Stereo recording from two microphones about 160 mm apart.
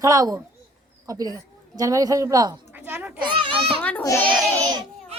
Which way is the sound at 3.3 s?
30° right (ahead or behind).